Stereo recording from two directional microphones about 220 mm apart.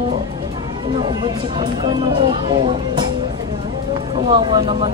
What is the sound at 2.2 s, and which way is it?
Speech, 20° right (ahead or behind).